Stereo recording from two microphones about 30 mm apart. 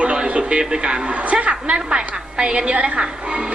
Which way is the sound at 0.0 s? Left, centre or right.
Right.